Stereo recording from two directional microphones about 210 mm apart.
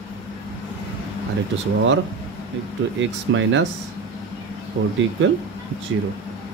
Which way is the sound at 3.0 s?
65° right (ahead or behind).